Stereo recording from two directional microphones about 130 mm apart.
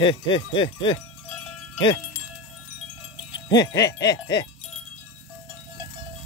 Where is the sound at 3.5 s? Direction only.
30° left (ahead or behind).